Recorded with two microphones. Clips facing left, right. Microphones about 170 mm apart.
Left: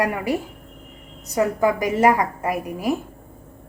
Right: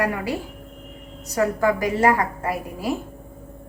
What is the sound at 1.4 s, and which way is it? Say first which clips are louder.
A woman's voice: left 1 dB; 20° left (ahead or behind).